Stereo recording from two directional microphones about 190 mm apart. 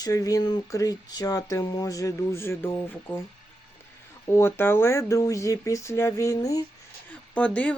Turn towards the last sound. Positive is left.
turn(degrees=5)  # may be behind; listen again after turning